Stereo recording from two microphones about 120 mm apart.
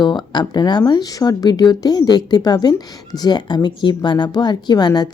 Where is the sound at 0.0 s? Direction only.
35° left (ahead or behind).